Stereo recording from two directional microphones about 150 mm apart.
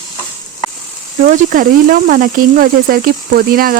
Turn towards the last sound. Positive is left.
turn(degrees=-75)  # may be behind; listen again after turning